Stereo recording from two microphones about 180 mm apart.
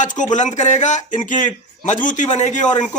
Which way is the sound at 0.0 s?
45° left (ahead or behind).